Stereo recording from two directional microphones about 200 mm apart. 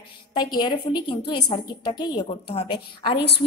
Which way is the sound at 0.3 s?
20° left (ahead or behind).